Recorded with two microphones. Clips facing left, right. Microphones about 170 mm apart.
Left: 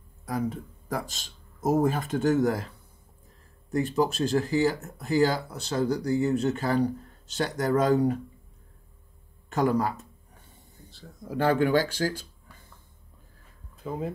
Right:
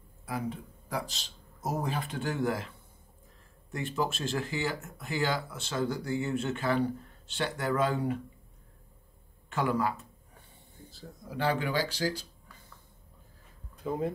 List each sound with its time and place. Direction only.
0.2 s speech: 40° left (ahead or behind)
3.7 s speech: 40° left (ahead or behind)
9.5 s speech: 40° left (ahead or behind)
10.9 s a man's voice: centre (ahead or behind)
11.2 s speech: 45° left (ahead or behind)
13.8 s a man's voice: centre (ahead or behind)